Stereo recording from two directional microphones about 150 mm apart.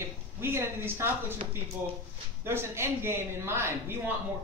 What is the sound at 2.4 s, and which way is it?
Speech, 15° right (ahead or behind).